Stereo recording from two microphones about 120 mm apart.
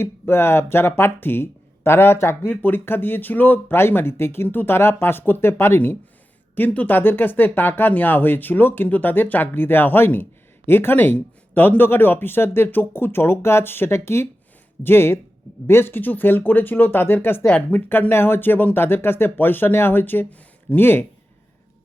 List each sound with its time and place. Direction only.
0.0 s speech: 20° left (ahead or behind)